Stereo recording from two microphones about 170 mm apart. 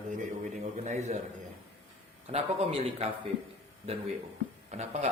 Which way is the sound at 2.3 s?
40° right (ahead or behind).